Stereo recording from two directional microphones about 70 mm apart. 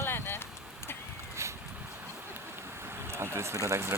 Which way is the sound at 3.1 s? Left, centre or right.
Right.